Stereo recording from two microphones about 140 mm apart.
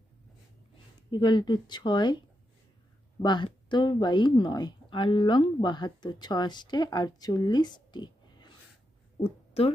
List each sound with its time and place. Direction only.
1.1 s speech: 35° left (ahead or behind)
9.2 s a woman's voice: 45° left (ahead or behind)